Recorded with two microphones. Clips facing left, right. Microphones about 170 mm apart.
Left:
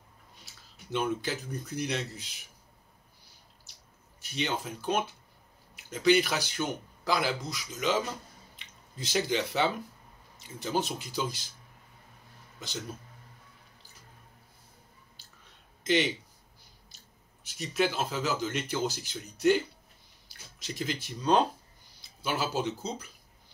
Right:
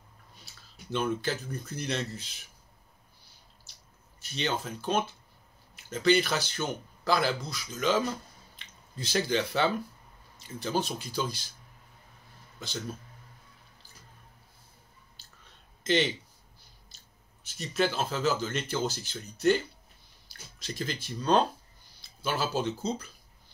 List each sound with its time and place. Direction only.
0.9 s speech: 15° left (ahead or behind)
4.2 s speech: 15° left (ahead or behind)
15.8 s speech: 15° left (ahead or behind)
16.9 s biting: 15° left (ahead or behind)
17.6 s speech: 15° left (ahead or behind)